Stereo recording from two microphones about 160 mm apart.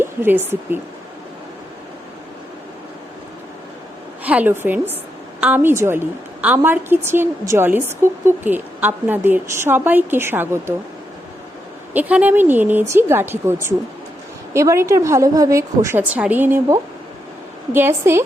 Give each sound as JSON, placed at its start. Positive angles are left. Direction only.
{"t": 0.0, "sound": "speech", "side_deg": -15}
{"t": 4.2, "sound": "a woman's voice", "side_deg": -10}
{"t": 11.9, "sound": "a woman's voice", "side_deg": -10}